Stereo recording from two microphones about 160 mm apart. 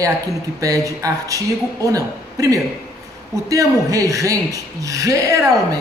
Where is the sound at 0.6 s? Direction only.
20° right (ahead or behind).